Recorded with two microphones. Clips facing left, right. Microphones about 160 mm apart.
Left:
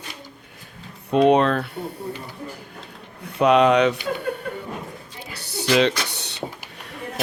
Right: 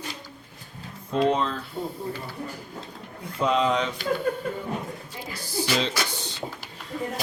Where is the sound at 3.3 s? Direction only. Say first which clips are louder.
Left 7 dB; 70° left (ahead or behind).